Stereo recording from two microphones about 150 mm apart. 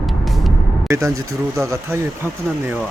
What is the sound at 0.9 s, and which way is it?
Speech, 20° right (ahead or behind).